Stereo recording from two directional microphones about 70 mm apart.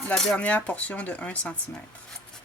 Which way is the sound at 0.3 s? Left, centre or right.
Left.